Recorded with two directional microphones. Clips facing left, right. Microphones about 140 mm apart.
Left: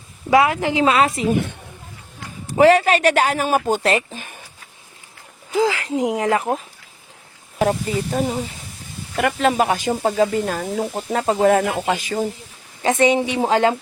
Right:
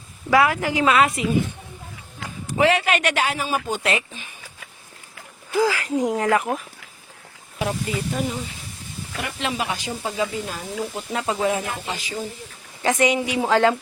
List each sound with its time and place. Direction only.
0.3 s a woman's voice: 25° left (ahead or behind)
2.6 s speech: 40° left (ahead or behind)
5.5 s a woman's voice: 25° left (ahead or behind)
7.9 s speech: 40° left (ahead or behind)
9.1 s speech: 50° left (ahead or behind)
10.9 s speech: 40° left (ahead or behind); by 12.3 s 55° left (ahead or behind)
12.8 s a woman's voice: 25° left (ahead or behind)
13.5 s a woman's voice: 20° left (ahead or behind)